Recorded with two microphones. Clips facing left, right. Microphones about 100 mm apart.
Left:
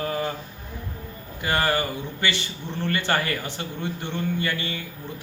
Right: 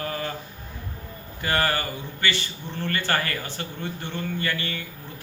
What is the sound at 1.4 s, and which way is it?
A man's voice, 20° left (ahead or behind).